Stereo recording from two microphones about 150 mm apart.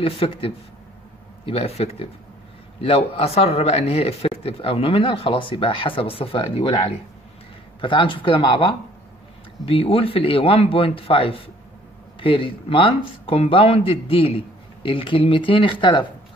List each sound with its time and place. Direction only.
0.0 s speech: 40° left (ahead or behind)
9.7 s speech: 40° left (ahead or behind)